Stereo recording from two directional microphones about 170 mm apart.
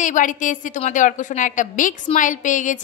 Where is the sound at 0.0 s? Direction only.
50° left (ahead or behind).